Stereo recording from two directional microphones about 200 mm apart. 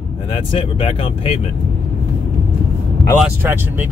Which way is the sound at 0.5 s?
30° left (ahead or behind).